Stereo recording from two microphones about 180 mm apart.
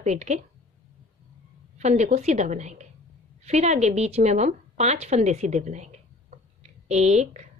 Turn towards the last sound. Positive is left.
turn(degrees=-40)  # may be behind; listen again after turning